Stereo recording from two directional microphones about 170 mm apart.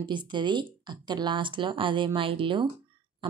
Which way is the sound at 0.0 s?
25° right (ahead or behind).